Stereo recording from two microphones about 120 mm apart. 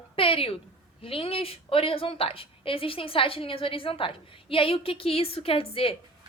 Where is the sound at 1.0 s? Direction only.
50° left (ahead or behind).